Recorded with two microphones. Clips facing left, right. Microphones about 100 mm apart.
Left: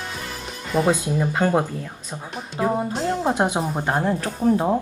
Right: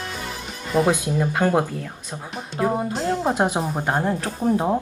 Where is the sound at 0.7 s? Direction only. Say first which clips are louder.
Right 1 dB; centre (ahead or behind).